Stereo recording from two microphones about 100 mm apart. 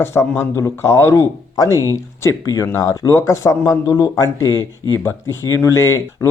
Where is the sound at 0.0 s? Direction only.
25° left (ahead or behind).